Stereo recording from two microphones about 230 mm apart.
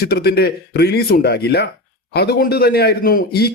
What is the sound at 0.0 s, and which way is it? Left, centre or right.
A man's voice, left.